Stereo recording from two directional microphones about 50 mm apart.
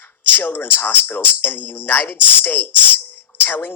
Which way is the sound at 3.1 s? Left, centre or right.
Left.